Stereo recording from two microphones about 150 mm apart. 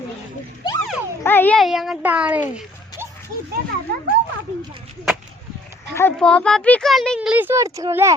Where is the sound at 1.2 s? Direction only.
15° left (ahead or behind).